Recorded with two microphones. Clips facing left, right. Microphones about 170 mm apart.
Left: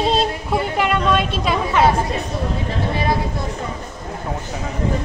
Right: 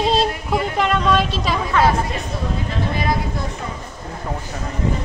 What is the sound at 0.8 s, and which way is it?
Speech, 5° left (ahead or behind).